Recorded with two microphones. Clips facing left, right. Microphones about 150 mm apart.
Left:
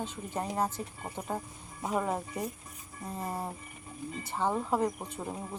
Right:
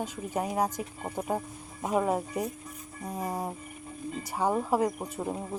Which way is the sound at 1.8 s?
10° right (ahead or behind).